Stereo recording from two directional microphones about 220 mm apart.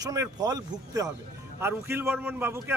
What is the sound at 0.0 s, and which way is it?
A man's voice, 15° right (ahead or behind).